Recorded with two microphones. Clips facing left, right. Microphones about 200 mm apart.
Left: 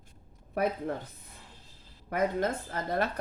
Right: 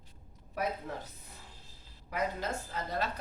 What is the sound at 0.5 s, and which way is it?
Speech, 55° left (ahead or behind).